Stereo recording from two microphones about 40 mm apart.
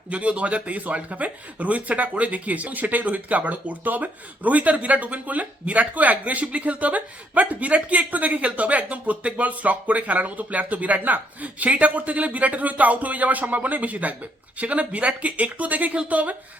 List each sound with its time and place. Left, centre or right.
0.1 s speech: right